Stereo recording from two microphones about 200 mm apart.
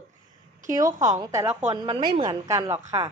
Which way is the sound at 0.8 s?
15° right (ahead or behind).